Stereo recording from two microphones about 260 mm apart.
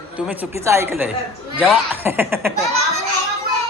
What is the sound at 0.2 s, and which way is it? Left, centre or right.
A woman's voice, centre.